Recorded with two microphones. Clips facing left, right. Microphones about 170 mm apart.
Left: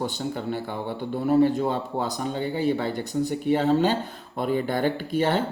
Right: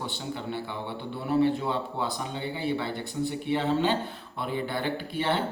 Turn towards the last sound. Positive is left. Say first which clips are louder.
# left 5 dB
turn(degrees=45)  # may be behind; listen again after turning